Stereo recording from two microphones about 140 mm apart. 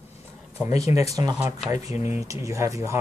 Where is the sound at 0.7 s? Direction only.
25° right (ahead or behind).